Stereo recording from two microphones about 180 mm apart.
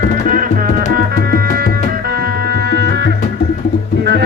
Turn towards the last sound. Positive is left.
turn(degrees=-65)  # may be behind; listen again after turning